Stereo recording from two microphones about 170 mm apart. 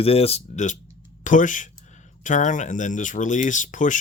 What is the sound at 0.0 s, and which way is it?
Speech, 35° left (ahead or behind).